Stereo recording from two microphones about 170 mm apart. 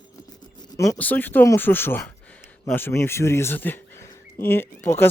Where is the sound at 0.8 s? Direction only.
15° left (ahead or behind).